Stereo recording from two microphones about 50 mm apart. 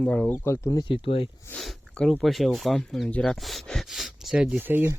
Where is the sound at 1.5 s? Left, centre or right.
Left.